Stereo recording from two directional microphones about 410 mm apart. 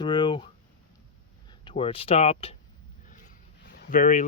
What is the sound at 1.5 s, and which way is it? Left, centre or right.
Speech, centre.